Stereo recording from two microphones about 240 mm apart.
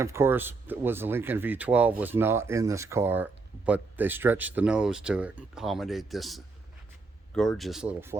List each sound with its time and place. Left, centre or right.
0.0 s speech: centre